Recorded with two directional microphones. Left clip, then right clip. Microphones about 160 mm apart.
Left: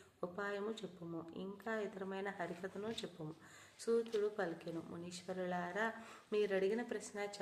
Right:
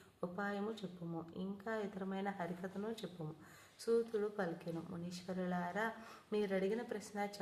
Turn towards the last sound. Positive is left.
turn(degrees=15)  # may be behind; listen again after turning